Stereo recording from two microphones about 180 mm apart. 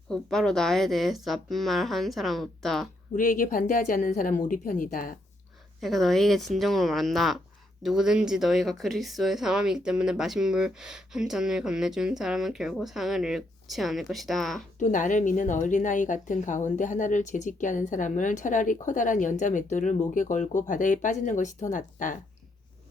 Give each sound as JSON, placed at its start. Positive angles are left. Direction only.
{"t": 0.1, "sound": "speech", "side_deg": 5}
{"t": 3.2, "sound": "a woman's voice", "side_deg": 50}
{"t": 5.8, "sound": "speech", "side_deg": 0}
{"t": 14.8, "sound": "a woman's voice", "side_deg": 45}